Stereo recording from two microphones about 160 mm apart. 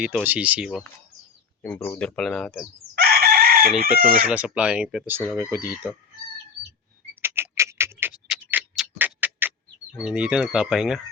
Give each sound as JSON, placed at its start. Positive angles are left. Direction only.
{"t": 0.0, "sound": "speech", "side_deg": -10}
{"t": 1.6, "sound": "speech", "side_deg": 10}
{"t": 2.9, "sound": "chicken", "side_deg": -85}
{"t": 4.3, "sound": "speech", "side_deg": -5}
{"t": 7.2, "sound": "a sound", "side_deg": -15}
{"t": 8.3, "sound": "tick-tock", "side_deg": -10}
{"t": 10.0, "sound": "speech", "side_deg": -5}